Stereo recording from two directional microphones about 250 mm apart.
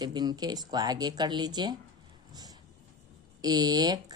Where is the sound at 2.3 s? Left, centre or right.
Centre.